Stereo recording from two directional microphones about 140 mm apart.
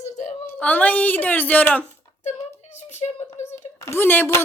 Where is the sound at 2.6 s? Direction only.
55° left (ahead or behind).